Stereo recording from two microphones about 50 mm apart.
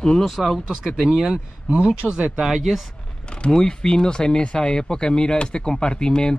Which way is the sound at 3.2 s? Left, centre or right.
Centre.